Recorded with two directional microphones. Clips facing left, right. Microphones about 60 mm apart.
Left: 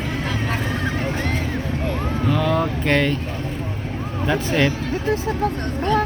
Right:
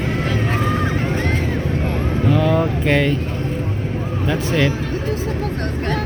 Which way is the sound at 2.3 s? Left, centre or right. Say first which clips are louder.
Right 3 dB; centre.